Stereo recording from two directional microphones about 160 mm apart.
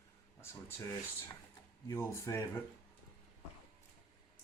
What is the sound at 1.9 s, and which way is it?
Speech, 20° left (ahead or behind).